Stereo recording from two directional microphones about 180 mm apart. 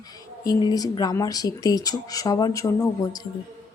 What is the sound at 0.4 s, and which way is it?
A woman's voice, 20° left (ahead or behind).